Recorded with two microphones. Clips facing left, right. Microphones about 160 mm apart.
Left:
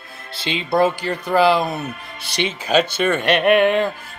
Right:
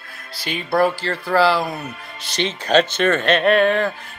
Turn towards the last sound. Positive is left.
turn(degrees=15)  # may be behind; listen again after turning